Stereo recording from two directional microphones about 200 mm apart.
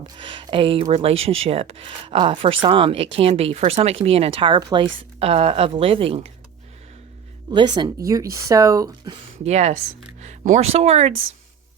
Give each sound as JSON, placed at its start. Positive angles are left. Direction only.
{"t": 0.0, "sound": "speech", "side_deg": -25}
{"t": 7.5, "sound": "speech", "side_deg": -20}
{"t": 9.4, "sound": "speech", "side_deg": -35}